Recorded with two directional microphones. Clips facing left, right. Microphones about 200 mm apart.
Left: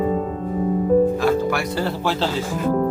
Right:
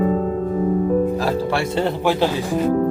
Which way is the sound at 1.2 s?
35° right (ahead or behind).